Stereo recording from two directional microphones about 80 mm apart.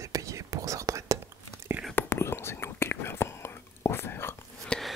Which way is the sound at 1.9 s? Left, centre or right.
Left.